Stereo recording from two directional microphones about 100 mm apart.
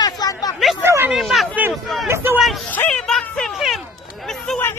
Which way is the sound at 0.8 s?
25° right (ahead or behind).